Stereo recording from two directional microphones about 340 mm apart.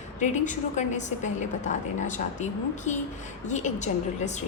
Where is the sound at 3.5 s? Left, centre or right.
Left.